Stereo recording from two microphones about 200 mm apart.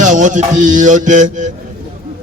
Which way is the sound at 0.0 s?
40° right (ahead or behind).